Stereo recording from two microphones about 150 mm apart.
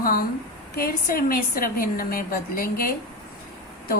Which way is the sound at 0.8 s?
85° left.